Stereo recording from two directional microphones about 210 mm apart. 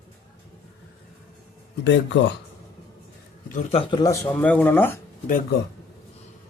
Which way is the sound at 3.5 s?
30° left (ahead or behind).